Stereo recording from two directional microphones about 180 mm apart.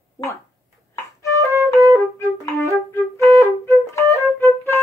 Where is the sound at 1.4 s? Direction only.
15° right (ahead or behind).